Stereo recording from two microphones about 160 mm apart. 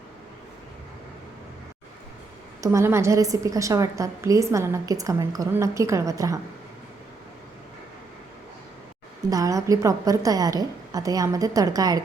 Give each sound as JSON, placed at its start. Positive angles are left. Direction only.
{"t": 2.6, "sound": "a woman's voice", "side_deg": -20}
{"t": 9.3, "sound": "a woman's voice", "side_deg": -20}